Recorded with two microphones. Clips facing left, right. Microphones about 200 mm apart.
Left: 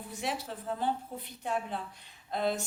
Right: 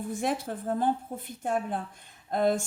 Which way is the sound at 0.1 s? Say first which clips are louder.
Right 5 dB; 50° right (ahead or behind).